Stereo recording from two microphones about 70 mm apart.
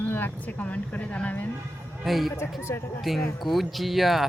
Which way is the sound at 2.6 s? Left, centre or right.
Left.